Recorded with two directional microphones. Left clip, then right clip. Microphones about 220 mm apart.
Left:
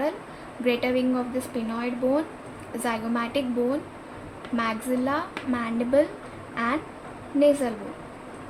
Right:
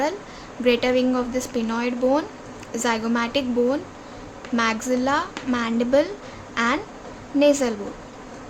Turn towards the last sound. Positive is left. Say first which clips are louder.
# right 3 dB
turn(degrees=-30)  # may be behind; listen again after turning